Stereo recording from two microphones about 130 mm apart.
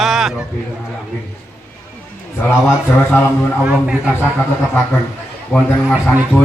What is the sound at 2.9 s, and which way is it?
Speech, 15° left (ahead or behind).